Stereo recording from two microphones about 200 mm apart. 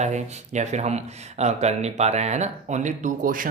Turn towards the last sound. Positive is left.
turn(degrees=-45)  # may be behind; listen again after turning